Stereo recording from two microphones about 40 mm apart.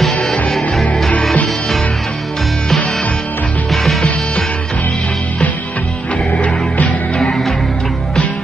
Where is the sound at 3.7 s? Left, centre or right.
Centre.